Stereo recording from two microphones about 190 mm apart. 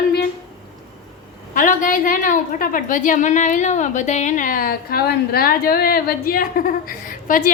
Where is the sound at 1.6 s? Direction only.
45° left (ahead or behind).